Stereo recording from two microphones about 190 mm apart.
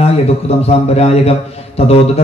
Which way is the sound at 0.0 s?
35° left (ahead or behind).